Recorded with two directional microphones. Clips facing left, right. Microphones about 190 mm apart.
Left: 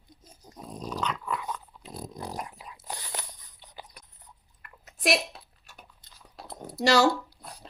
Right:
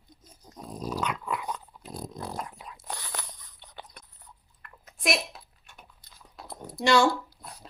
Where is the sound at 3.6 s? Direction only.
5° left (ahead or behind).